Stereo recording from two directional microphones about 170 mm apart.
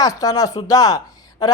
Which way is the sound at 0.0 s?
20° left (ahead or behind).